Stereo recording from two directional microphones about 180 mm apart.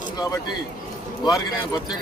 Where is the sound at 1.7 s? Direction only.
25° left (ahead or behind).